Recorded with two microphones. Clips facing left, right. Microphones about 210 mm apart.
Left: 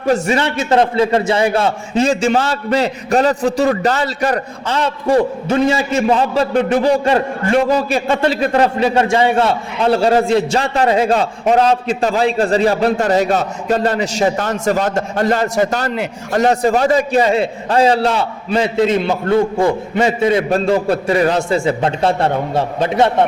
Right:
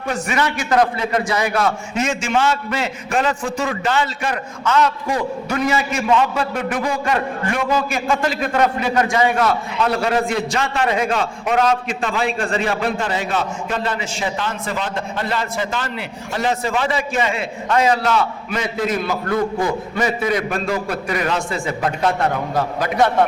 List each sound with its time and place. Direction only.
0.1 s a man's voice: 30° left (ahead or behind)